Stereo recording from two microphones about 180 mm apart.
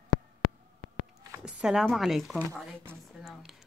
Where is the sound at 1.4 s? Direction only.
5° right (ahead or behind).